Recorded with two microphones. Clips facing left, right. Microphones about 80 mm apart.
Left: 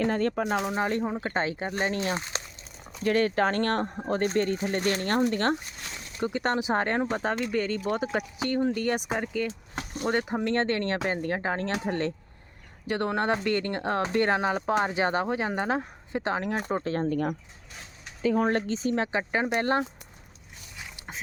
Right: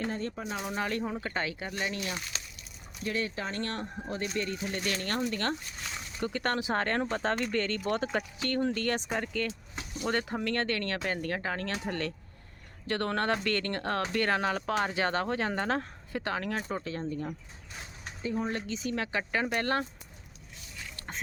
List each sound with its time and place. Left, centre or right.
0.0 s speech: left
0.8 s speech: left
3.0 s speech: left
6.1 s speech: centre
9.7 s a sound: left
10.1 s speech: centre
12.9 s speech: centre
16.7 s speech: left
17.1 s speech: left
18.2 s speech: left
18.4 s speech: left